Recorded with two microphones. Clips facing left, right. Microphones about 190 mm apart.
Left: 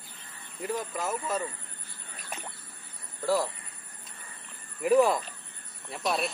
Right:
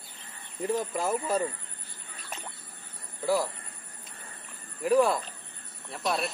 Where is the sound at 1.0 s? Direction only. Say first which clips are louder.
Right 3 dB; 30° right (ahead or behind).